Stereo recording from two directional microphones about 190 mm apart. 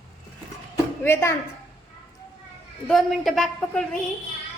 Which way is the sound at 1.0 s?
15° left (ahead or behind).